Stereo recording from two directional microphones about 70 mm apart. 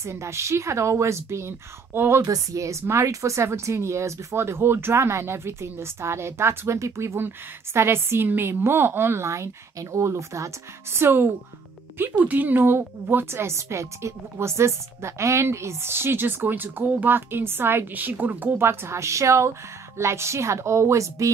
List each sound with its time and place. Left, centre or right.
0.0 s a woman's voice: right
2.2 s a woman's voice: right